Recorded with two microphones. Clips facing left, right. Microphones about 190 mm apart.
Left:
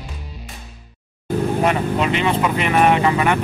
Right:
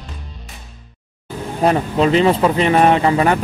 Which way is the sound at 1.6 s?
35° right (ahead or behind).